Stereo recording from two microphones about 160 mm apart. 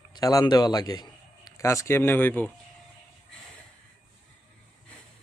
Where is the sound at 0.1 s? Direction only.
25° left (ahead or behind).